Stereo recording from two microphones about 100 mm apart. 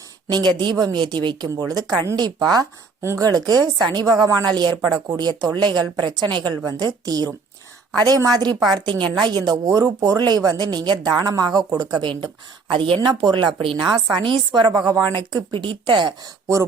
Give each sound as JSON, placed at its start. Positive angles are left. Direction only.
{"t": 0.3, "sound": "a woman's voice", "side_deg": -45}
{"t": 3.0, "sound": "a woman's voice", "side_deg": -30}
{"t": 14.7, "sound": "speech", "side_deg": -40}
{"t": 15.5, "sound": "speech", "side_deg": -55}